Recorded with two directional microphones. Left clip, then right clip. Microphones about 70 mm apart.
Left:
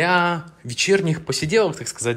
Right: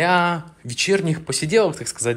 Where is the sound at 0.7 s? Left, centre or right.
Left.